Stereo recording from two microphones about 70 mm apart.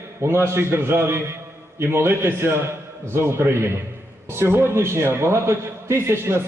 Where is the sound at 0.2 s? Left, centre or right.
Right.